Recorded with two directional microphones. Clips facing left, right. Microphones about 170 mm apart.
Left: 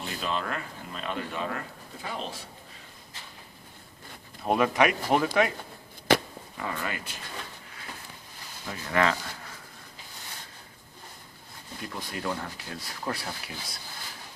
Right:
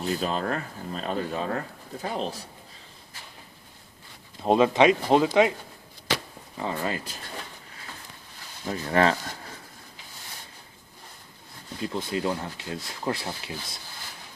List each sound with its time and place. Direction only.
0.0 s speech: 35° right (ahead or behind)
4.4 s speech: 25° right (ahead or behind)
6.6 s speech: 30° right (ahead or behind)
8.6 s speech: 35° right (ahead or behind)
11.8 s speech: 25° right (ahead or behind)